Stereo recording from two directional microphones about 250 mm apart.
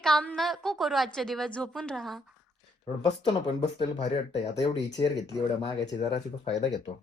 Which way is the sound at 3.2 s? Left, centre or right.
Centre.